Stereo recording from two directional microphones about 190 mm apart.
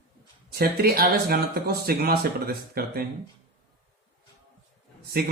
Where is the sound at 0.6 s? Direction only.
55° right (ahead or behind).